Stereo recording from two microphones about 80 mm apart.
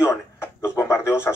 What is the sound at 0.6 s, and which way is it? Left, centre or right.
Speech, left.